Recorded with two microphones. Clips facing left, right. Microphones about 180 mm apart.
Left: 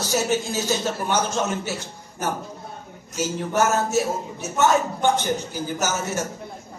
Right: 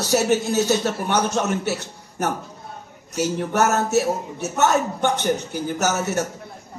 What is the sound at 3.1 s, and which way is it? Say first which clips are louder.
A man's voice: right 2 dB; 65° right (ahead or behind).